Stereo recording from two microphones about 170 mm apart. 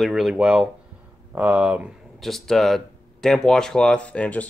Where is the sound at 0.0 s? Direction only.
Centre (ahead or behind).